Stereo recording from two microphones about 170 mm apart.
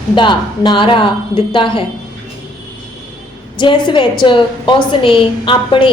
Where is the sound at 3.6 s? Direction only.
25° left (ahead or behind).